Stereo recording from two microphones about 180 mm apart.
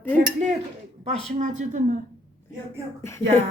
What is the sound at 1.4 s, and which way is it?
Speech, 45° right (ahead or behind).